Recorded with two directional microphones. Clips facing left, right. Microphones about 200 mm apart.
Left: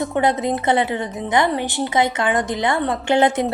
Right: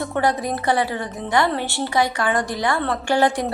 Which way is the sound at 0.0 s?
20° left (ahead or behind).